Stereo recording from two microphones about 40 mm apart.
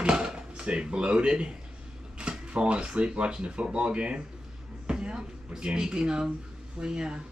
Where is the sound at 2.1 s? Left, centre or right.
Right.